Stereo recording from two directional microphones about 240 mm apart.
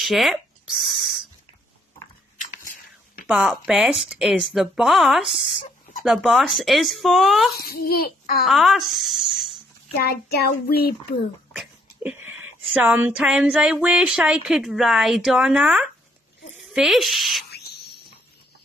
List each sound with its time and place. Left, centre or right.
0.0 s speech: centre
3.3 s speech: centre
7.6 s a child's voice: left
8.5 s speech: centre
9.9 s a child's voice: left
11.5 s speech: centre